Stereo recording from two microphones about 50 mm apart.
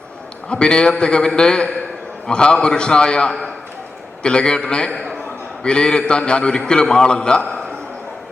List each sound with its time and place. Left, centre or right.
0.4 s a man's voice: left